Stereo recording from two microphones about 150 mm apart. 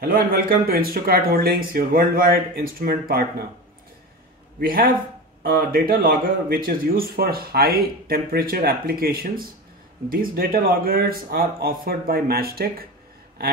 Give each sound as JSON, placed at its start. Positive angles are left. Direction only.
{"t": 0.0, "sound": "speech", "side_deg": -75}
{"t": 4.6, "sound": "speech", "side_deg": -75}